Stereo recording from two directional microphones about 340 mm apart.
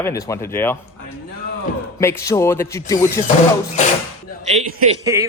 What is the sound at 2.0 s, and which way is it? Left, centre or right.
Speech, centre.